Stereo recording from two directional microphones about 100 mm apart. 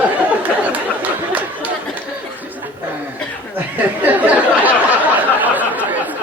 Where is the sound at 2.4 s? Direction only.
15° right (ahead or behind).